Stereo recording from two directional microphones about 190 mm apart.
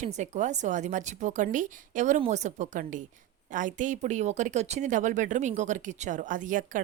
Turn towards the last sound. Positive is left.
turn(degrees=-40)  # may be behind; listen again after turning